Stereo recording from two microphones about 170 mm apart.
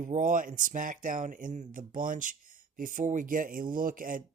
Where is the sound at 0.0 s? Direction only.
50° right (ahead or behind).